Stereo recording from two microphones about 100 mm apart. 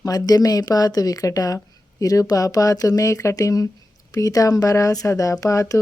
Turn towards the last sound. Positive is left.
turn(degrees=35)  # may be behind; listen again after turning